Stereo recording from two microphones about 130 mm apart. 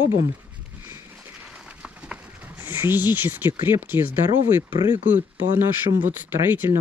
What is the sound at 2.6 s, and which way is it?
Speech, 15° right (ahead or behind).